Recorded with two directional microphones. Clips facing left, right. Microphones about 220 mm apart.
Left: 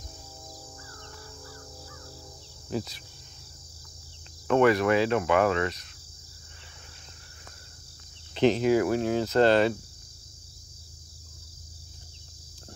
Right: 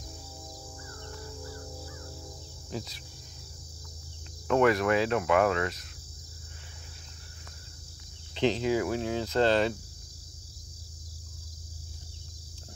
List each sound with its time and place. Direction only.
4.5 s cricket: centre (ahead or behind)
8.4 s speech: 50° left (ahead or behind)